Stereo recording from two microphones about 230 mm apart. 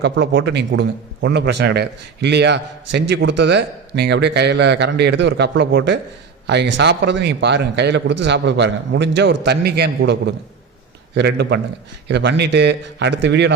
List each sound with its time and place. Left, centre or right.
0.0 s a man's voice: right